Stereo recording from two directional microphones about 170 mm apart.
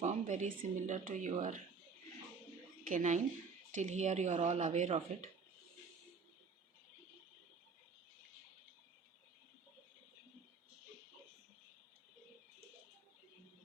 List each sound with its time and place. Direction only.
0.0 s speech: 45° right (ahead or behind)
2.9 s speech: 45° right (ahead or behind)